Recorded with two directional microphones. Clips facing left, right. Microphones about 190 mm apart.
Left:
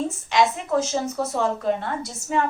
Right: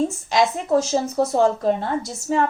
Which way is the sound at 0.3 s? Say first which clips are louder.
Even; 35° right (ahead or behind).